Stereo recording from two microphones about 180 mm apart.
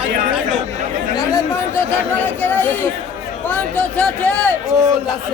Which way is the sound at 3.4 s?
5° left (ahead or behind).